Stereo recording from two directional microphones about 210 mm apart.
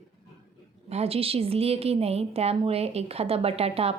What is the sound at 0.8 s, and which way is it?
A woman's voice, 30° right (ahead or behind).